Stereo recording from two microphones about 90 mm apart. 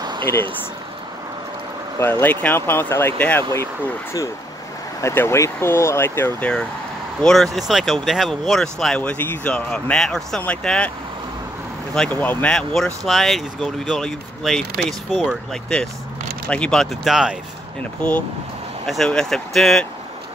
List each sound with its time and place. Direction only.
0.0 s a sound: 55° right (ahead or behind)
2.0 s speech: 20° left (ahead or behind)
5.0 s speech: 30° left (ahead or behind)
7.2 s speech: 5° left (ahead or behind); by 9.5 s 20° left (ahead or behind)
9.5 s speech: 10° left (ahead or behind)
11.9 s speech: 5° left (ahead or behind)
12.2 s speech: 20° left (ahead or behind)
12.5 s speech: 5° left (ahead or behind)
15.5 s speech: 5° left (ahead or behind)
18.9 s speech: 5° left (ahead or behind)